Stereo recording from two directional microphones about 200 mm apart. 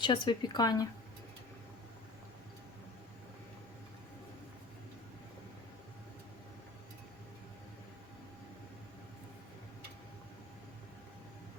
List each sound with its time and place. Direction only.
0.0 s a woman's voice: 25° left (ahead or behind)